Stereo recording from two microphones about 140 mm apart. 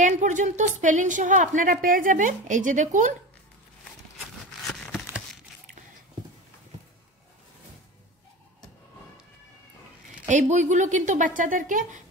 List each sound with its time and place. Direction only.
0.0 s speech: 65° right (ahead or behind)
4.7 s a sound: 5° left (ahead or behind)
10.2 s speech: 60° right (ahead or behind)